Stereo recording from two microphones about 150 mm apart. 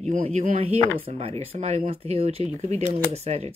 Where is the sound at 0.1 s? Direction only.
50° right (ahead or behind).